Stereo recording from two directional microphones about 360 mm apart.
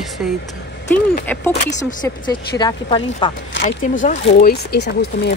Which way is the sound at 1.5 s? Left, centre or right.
Centre.